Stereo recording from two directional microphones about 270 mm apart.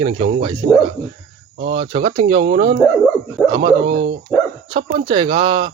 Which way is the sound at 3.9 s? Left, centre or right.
Right.